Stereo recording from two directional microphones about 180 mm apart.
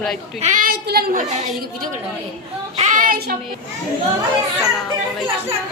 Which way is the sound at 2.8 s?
45° right (ahead or behind).